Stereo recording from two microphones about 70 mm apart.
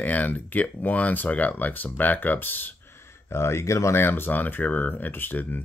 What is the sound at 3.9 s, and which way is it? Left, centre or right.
Speech, left.